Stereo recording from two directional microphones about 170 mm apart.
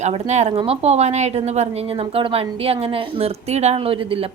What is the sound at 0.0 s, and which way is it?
A woman's voice, 40° right (ahead or behind).